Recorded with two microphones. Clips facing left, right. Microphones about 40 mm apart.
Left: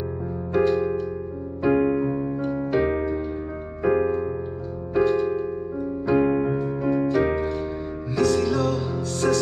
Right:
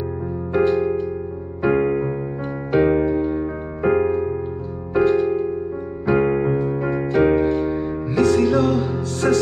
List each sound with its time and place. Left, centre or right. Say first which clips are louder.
0.5 s music: right 3 dB; centre
1.6 s electric piano: right 2 dB; centre
2.7 s music: right 8 dB; centre